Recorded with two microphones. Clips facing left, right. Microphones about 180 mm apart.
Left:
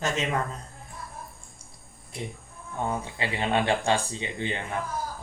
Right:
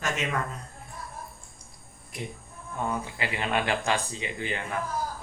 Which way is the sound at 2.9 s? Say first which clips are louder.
Left 1 dB; 25° left (ahead or behind).